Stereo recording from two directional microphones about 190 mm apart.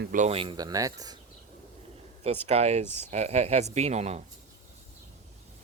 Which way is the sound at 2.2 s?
35° right (ahead or behind).